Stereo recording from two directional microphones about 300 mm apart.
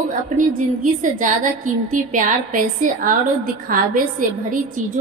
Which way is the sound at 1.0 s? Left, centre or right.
Right.